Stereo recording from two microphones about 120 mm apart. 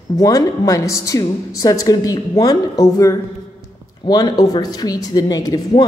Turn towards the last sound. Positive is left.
turn(degrees=35)  # may be behind; listen again after turning